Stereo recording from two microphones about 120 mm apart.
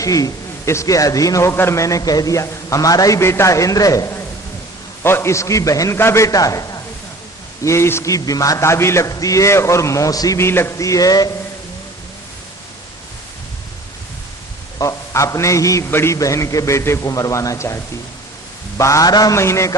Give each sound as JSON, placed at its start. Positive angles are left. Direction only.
{"t": 0.0, "sound": "a man's voice", "side_deg": 30}
{"t": 14.8, "sound": "a man's voice", "side_deg": 25}
{"t": 18.8, "sound": "a man's voice", "side_deg": 25}